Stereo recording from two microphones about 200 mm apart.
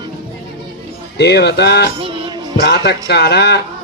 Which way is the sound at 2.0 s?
25° right (ahead or behind).